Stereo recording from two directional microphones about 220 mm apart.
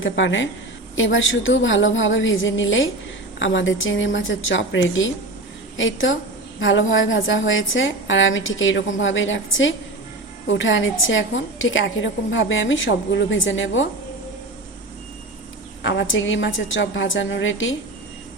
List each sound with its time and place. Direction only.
0.0 s a woman's voice: 60° left (ahead or behind)
15.8 s a woman's voice: 55° left (ahead or behind)